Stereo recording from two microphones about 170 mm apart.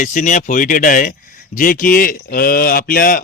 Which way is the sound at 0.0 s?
50° left (ahead or behind).